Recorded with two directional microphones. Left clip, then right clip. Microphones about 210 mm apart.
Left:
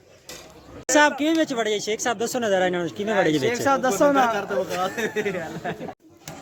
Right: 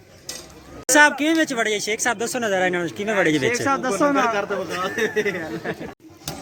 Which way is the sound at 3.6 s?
55° left (ahead or behind).